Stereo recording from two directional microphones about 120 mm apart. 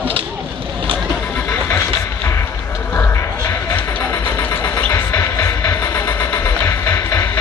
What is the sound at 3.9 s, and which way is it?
Music, 15° left (ahead or behind).